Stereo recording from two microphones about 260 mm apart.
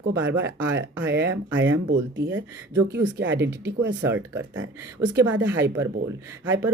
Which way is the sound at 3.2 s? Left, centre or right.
Right.